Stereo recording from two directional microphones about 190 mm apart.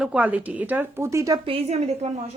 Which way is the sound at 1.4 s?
30° right (ahead or behind).